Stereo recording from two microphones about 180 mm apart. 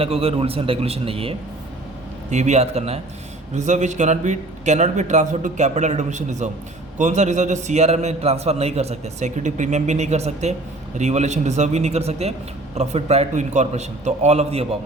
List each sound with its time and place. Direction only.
0.0 s a man's voice: 35° right (ahead or behind)